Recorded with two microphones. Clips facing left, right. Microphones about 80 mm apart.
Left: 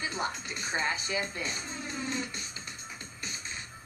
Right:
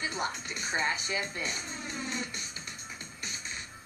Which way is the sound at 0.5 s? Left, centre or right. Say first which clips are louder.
Even; left.